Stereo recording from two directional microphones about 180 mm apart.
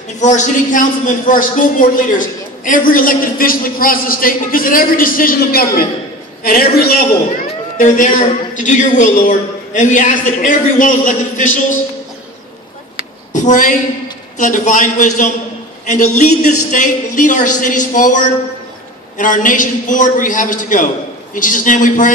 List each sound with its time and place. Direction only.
0.2 s a man's voice: 40° left (ahead or behind)
13.3 s a woman's voice: 45° left (ahead or behind)